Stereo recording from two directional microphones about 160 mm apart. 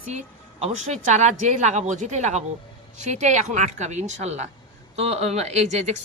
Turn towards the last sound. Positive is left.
turn(degrees=-45)  # may be behind; listen again after turning